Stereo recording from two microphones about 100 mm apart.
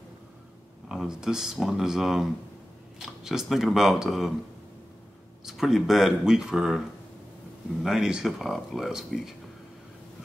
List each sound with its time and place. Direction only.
0.8 s speech: 5° right (ahead or behind)
3.3 s speech: 5° right (ahead or behind)
5.4 s speech: 5° right (ahead or behind)
7.8 s speech: 5° right (ahead or behind)